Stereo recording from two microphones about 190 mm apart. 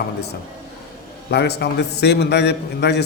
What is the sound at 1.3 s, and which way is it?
A man's voice, 60° left (ahead or behind).